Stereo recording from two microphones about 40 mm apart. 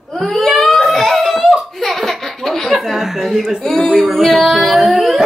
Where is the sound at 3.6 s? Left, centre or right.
Centre.